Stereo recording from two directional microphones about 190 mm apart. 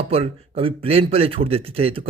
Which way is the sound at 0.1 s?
30° right (ahead or behind).